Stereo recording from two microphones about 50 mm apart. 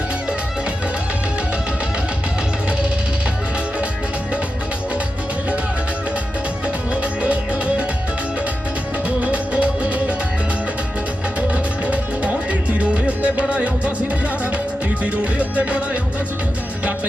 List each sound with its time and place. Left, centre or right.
6.9 s music: right
9.0 s music: right
11.3 s music: right
15.0 s music: right